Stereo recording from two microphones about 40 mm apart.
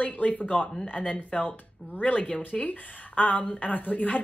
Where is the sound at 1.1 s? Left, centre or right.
Left.